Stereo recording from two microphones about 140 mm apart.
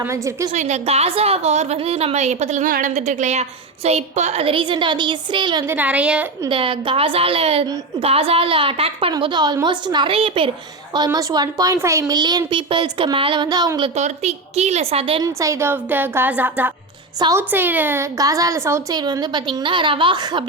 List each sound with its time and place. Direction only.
0.0 s a woman's voice: 20° right (ahead or behind)
0.5 s a woman's voice: 55° right (ahead or behind)
2.6 s a woman's voice: 75° right (ahead or behind); by 5.6 s 35° right (ahead or behind)
5.6 s a woman's voice: 10° right (ahead or behind)
6.5 s a woman's voice: 40° right (ahead or behind)
10.9 s a woman's voice: 25° right (ahead or behind)
13.9 s a woman's voice: 50° right (ahead or behind)
15.2 s a woman's voice: 20° right (ahead or behind)